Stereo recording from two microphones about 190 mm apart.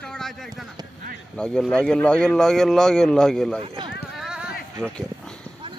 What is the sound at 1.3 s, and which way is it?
Speech, 5° left (ahead or behind).